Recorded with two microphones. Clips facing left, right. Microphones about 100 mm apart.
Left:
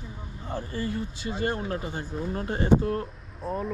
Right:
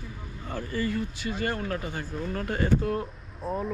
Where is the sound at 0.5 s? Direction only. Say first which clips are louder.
Right 1 dB; 20° left (ahead or behind).